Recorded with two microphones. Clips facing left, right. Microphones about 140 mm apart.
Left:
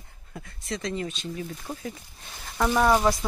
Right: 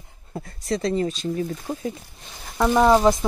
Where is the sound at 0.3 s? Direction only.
40° right (ahead or behind).